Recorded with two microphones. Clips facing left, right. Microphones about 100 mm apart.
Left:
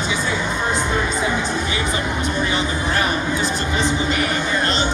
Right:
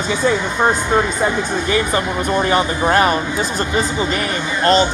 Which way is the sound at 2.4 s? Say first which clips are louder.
Right 6 dB; 50° right (ahead or behind).